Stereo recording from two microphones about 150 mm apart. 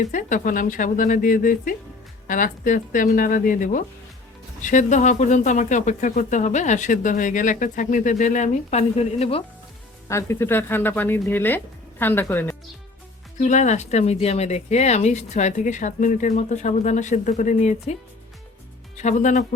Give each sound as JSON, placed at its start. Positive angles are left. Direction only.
{"t": 0.0, "sound": "speech", "side_deg": 55}
{"t": 10.1, "sound": "speech", "side_deg": 20}
{"t": 13.4, "sound": "speech", "side_deg": 55}
{"t": 18.9, "sound": "speech", "side_deg": 50}